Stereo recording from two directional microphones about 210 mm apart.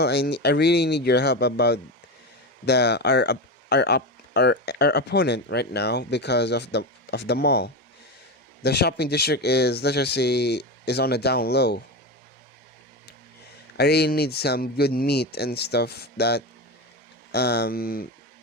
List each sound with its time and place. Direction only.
0.0 s speech: 50° left (ahead or behind)
13.7 s speech: 50° left (ahead or behind)